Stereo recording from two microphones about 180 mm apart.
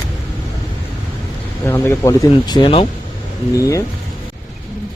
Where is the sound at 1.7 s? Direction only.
15° left (ahead or behind).